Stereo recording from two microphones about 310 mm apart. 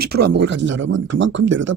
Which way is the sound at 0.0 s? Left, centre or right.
Right.